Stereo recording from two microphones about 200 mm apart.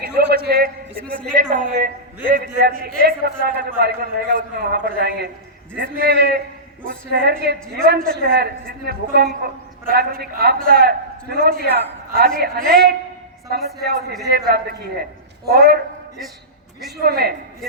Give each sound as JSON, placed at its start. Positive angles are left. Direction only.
{"t": 0.0, "sound": "a sound", "side_deg": -50}
{"t": 1.5, "sound": "a man's voice", "side_deg": -45}
{"t": 17.0, "sound": "a man's voice", "side_deg": -50}